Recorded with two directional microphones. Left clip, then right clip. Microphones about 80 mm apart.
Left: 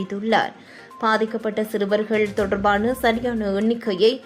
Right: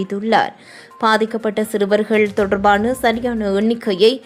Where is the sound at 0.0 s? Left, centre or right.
Right.